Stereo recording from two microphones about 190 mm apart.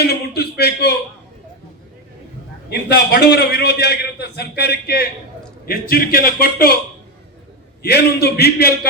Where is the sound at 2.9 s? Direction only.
60° left (ahead or behind).